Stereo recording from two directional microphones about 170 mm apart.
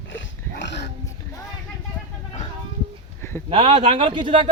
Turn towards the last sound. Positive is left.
turn(degrees=-30)  # may be behind; listen again after turning